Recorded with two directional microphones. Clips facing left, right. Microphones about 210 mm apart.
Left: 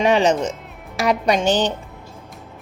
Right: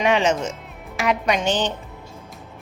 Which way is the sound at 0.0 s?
35° left (ahead or behind).